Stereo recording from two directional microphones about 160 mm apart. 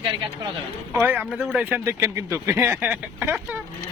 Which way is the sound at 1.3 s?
Centre (ahead or behind).